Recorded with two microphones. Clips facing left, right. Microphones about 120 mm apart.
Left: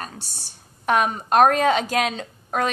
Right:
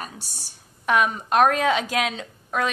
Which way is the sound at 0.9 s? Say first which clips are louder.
Left 1 dB; 40° left (ahead or behind).